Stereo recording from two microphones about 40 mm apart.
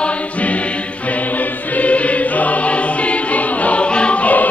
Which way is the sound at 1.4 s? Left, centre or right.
Left.